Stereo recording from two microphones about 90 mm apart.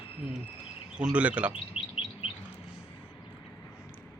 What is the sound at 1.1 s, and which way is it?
Speech, 15° right (ahead or behind).